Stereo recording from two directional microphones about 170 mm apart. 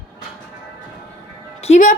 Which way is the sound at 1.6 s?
45° left (ahead or behind).